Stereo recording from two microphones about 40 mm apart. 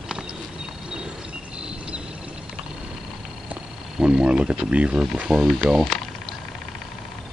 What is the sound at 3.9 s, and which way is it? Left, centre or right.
Speech, centre.